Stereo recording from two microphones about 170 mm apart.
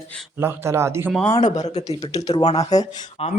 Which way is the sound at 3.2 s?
35° left (ahead or behind).